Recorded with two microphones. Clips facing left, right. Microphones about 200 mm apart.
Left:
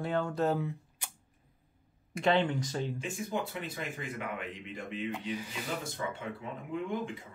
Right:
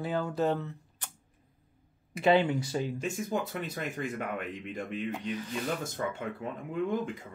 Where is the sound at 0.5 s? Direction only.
10° left (ahead or behind).